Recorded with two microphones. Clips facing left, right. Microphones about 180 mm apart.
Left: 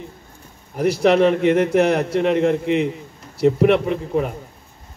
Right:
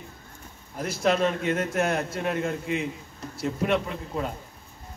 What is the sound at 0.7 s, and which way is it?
A man's voice, 70° left (ahead or behind).